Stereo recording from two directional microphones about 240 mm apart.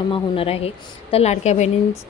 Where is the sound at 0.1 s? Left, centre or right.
Left.